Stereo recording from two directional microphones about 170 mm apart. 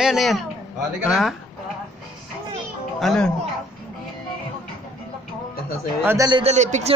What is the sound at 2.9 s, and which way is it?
Speech, 5° left (ahead or behind).